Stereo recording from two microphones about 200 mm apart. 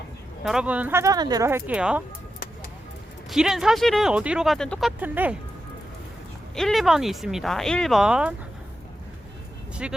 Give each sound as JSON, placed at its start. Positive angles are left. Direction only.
{"t": 0.4, "sound": "speech", "side_deg": -5}
{"t": 3.2, "sound": "speech", "side_deg": 0}
{"t": 6.6, "sound": "speech", "side_deg": 0}
{"t": 9.8, "sound": "speech", "side_deg": -5}